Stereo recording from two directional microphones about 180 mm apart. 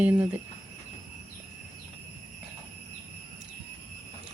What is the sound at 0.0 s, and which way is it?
Speech, 10° right (ahead or behind).